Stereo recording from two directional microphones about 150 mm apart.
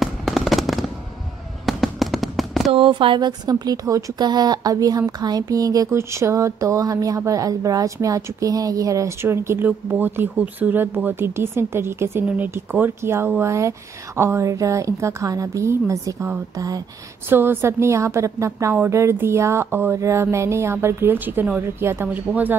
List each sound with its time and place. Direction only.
0.0 s fireworks: centre (ahead or behind)
2.7 s a woman's voice: 35° right (ahead or behind); by 22.6 s 10° right (ahead or behind)